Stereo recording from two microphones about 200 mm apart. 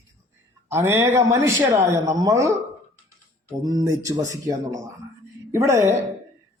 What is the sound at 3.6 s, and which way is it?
A man's voice, 20° right (ahead or behind).